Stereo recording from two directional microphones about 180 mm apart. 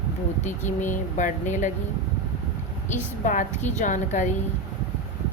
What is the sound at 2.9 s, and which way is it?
Speech, 45° left (ahead or behind).